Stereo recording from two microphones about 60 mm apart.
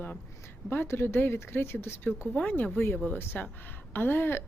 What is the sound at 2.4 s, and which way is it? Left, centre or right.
A woman's voice, left.